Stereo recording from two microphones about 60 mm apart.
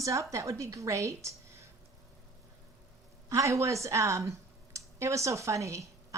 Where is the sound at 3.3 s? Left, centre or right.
Right.